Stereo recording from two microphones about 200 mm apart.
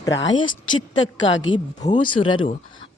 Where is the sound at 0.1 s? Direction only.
65° left (ahead or behind).